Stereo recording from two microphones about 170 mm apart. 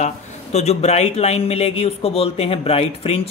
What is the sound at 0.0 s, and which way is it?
Speech, 40° left (ahead or behind).